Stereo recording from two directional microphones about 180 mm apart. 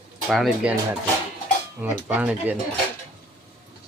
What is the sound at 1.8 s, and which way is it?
Speech, 10° right (ahead or behind).